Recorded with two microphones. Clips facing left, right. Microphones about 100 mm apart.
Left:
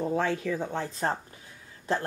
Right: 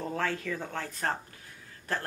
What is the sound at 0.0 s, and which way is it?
A woman's voice, 15° left (ahead or behind).